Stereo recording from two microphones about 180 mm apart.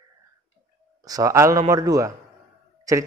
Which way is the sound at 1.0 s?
20° right (ahead or behind).